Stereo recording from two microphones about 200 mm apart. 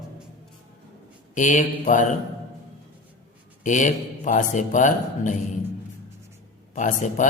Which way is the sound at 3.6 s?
40° left (ahead or behind).